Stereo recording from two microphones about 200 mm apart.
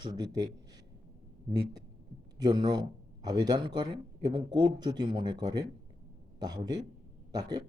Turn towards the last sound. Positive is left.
turn(degrees=-20)  # may be behind; listen again after turning